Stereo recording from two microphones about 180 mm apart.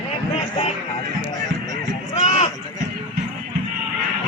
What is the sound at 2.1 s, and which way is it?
Run, 35° left (ahead or behind).